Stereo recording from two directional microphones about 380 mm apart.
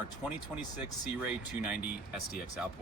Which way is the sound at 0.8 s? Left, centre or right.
Centre.